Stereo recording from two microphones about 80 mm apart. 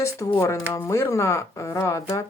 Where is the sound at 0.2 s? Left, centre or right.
Left.